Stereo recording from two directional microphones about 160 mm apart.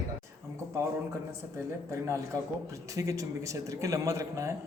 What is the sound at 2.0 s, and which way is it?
Speech, 15° right (ahead or behind).